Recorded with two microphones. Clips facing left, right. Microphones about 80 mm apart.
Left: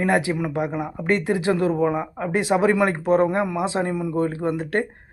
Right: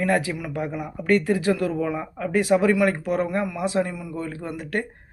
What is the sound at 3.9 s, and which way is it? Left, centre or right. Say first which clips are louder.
Speech: left 8 dB; left.